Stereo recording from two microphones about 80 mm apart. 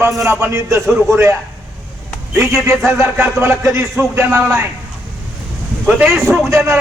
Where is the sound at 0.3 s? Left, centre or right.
Right.